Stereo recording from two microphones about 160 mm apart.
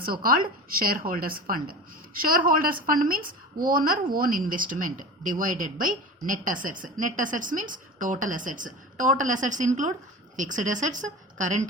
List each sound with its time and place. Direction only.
0.0 s a woman's voice: 65° right (ahead or behind)